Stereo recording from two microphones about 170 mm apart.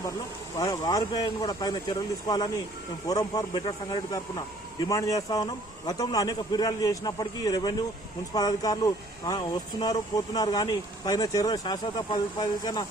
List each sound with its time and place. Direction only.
0.6 s a man's voice: 20° left (ahead or behind)